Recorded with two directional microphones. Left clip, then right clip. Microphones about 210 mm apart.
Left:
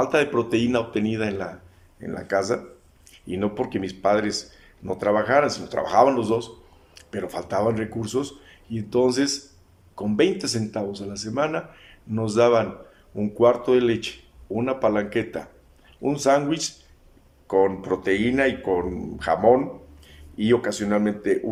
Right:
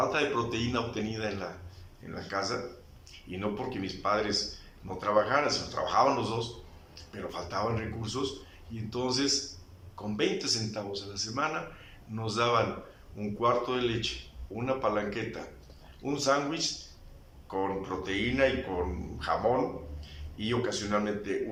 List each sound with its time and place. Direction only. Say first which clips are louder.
0.1 s speech: left 8 dB; 45° left (ahead or behind)